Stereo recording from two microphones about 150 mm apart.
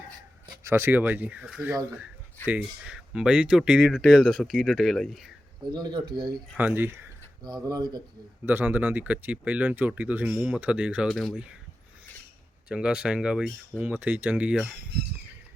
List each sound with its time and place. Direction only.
0.4 s speech: 25° right (ahead or behind); by 5.2 s centre (ahead or behind)
5.7 s speech: 30° right (ahead or behind)
6.6 s speech: 10° right (ahead or behind)
7.4 s speech: 30° right (ahead or behind)
8.4 s speech: 10° right (ahead or behind)
12.6 s speech: 5° right (ahead or behind)